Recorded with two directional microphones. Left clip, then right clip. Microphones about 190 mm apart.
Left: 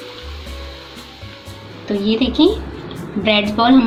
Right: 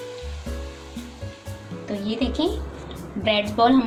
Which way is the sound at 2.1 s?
5° right (ahead or behind).